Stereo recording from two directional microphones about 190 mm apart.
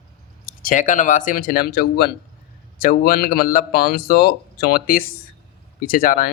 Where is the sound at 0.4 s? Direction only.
45° left (ahead or behind).